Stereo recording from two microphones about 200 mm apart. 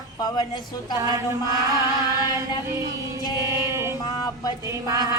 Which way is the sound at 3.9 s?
20° left (ahead or behind).